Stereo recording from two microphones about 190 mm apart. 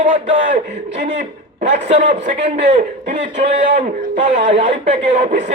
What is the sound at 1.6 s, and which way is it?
Speech, 35° right (ahead or behind).